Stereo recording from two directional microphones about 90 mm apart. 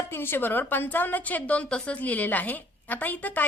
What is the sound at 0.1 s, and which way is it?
A woman's voice, 25° left (ahead or behind).